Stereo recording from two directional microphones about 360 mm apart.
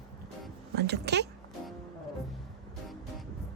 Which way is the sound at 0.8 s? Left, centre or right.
Right.